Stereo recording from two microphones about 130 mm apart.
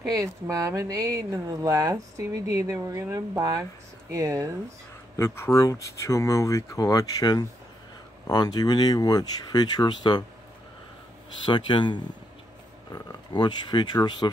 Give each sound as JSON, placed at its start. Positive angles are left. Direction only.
{"t": 0.0, "sound": "speech", "side_deg": -25}
{"t": 5.1, "sound": "speech", "side_deg": 20}
{"t": 11.4, "sound": "speech", "side_deg": 40}